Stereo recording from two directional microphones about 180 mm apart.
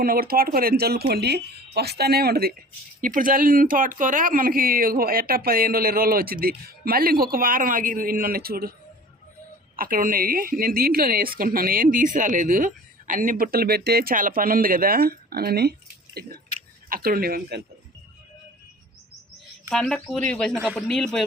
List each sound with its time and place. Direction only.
0.0 s speech: 55° right (ahead or behind)
3.0 s a woman's voice: 45° right (ahead or behind)
9.7 s a woman's voice: 50° right (ahead or behind)
19.7 s speech: 5° left (ahead or behind)